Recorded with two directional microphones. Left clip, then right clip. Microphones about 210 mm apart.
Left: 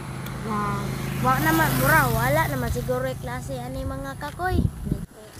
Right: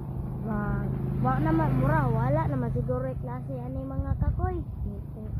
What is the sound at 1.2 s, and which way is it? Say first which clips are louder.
Speech: left 7 dB; 15° left (ahead or behind).